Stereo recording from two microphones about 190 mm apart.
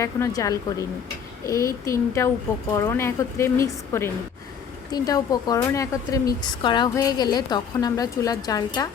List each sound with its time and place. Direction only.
0.0 s a woman's voice: 15° left (ahead or behind)